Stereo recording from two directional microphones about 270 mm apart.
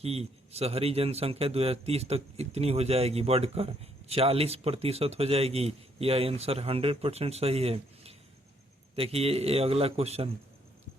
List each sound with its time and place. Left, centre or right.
0.0 s a man's voice: right